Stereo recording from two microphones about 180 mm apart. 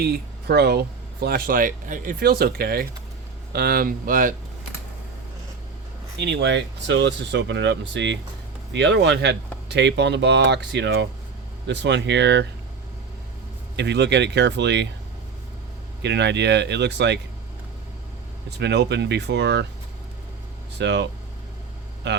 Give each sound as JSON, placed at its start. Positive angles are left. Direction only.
{"t": 0.0, "sound": "speech", "side_deg": -65}
{"t": 6.2, "sound": "speech", "side_deg": -75}
{"t": 13.7, "sound": "speech", "side_deg": -70}
{"t": 16.0, "sound": "speech", "side_deg": -75}
{"t": 18.5, "sound": "speech", "side_deg": -70}
{"t": 20.7, "sound": "speech", "side_deg": -75}